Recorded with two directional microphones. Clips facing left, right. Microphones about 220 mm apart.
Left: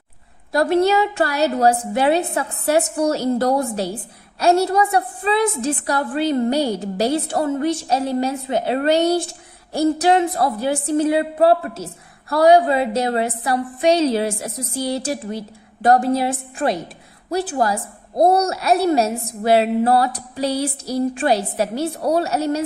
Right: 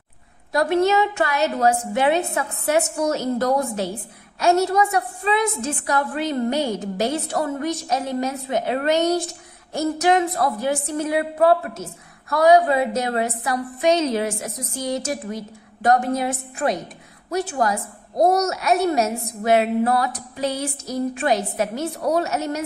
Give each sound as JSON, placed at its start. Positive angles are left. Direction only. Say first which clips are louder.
{"t": 0.5, "sound": "a woman's voice", "louder": "left 2 dB", "side_deg": 35}